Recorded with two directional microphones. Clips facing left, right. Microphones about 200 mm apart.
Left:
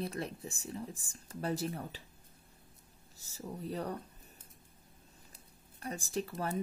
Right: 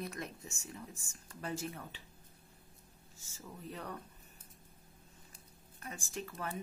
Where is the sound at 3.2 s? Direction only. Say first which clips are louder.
Left 7 dB; 35° left (ahead or behind).